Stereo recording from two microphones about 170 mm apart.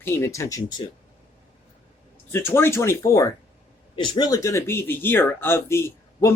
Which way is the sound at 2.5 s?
15° left (ahead or behind).